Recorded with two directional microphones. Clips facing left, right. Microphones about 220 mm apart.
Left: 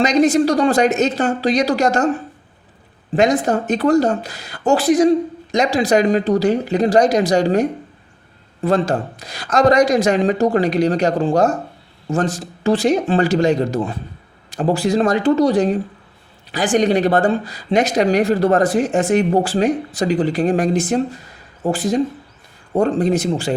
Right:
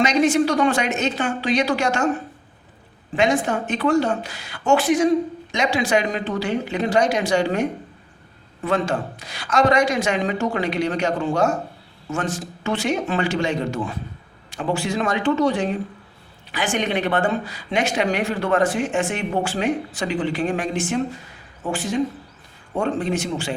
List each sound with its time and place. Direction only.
0.0 s speech: 40° left (ahead or behind)
3.2 s speech: 40° left (ahead or behind)